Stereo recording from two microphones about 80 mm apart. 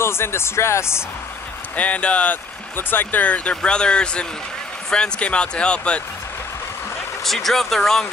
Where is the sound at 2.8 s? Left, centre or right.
Left.